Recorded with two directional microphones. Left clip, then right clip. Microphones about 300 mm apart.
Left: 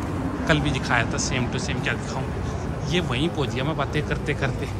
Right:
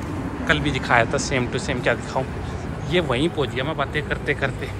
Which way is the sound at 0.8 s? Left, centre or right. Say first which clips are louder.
Right 7 dB; centre.